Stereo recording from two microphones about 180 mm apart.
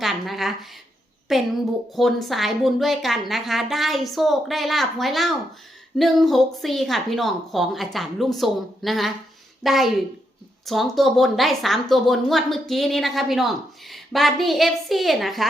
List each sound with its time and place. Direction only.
0.0 s a woman's voice: centre (ahead or behind)